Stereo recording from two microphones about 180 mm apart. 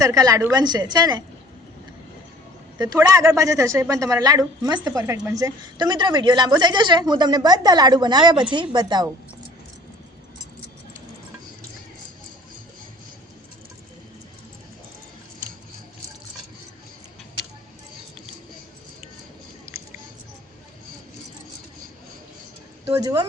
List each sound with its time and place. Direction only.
0.0 s a woman's voice: 20° right (ahead or behind)
2.7 s a woman's voice: 20° right (ahead or behind)
22.9 s a woman's voice: 20° right (ahead or behind)